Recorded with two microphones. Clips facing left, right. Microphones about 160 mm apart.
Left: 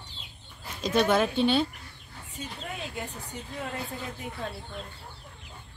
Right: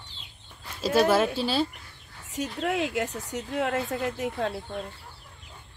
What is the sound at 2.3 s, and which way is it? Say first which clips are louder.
Speech: right 11 dB; 90° right.